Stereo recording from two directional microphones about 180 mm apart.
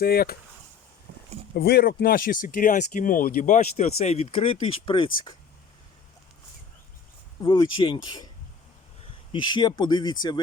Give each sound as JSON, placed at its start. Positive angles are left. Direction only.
{"t": 0.0, "sound": "speech", "side_deg": 60}
{"t": 1.5, "sound": "speech", "side_deg": 60}
{"t": 7.4, "sound": "speech", "side_deg": 25}
{"t": 9.3, "sound": "speech", "side_deg": 25}